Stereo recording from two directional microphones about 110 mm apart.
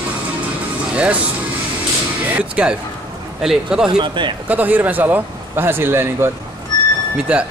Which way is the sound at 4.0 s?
45° right (ahead or behind).